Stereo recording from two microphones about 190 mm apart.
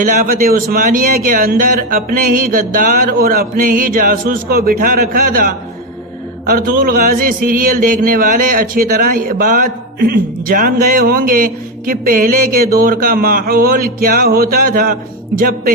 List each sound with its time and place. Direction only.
0.0 s a man's voice: 45° right (ahead or behind)